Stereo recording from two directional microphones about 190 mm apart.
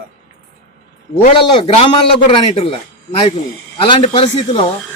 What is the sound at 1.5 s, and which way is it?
A man's voice, 30° left (ahead or behind).